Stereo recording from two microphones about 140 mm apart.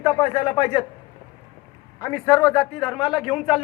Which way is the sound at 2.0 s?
25° left (ahead or behind).